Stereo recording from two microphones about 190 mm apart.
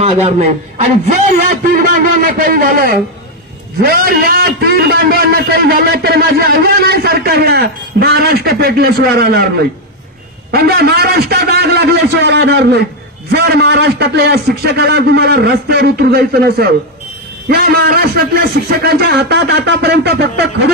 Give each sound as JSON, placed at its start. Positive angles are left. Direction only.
{"t": 0.0, "sound": "a man's voice", "side_deg": -35}
{"t": 1.5, "sound": "a man's voice", "side_deg": -45}
{"t": 10.5, "sound": "a man's voice", "side_deg": -55}